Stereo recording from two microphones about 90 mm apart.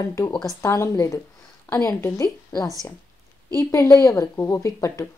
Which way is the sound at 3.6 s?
35° left (ahead or behind).